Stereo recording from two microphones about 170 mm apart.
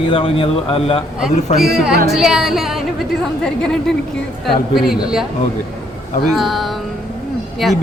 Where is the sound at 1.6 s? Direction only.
Centre (ahead or behind).